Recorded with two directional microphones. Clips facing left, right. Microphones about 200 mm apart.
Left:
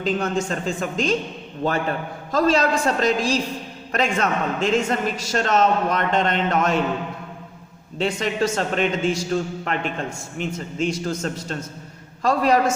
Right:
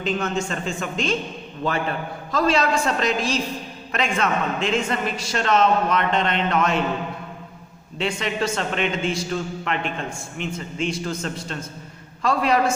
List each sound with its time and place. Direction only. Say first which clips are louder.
0.0 s a man's voice: left 2 dB; 35° left (ahead or behind)
3.9 s a man's voice: left 1 dB; 40° left (ahead or behind)
7.9 s a man's voice: left 2 dB; 40° left (ahead or behind)